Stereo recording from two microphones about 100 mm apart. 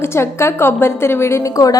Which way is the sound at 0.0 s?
25° left (ahead or behind).